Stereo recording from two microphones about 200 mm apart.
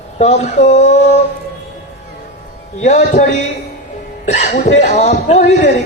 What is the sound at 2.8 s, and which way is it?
Speech, 35° left (ahead or behind).